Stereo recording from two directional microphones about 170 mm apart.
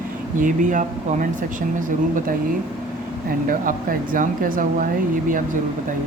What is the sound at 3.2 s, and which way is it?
Speech, 55° right (ahead or behind).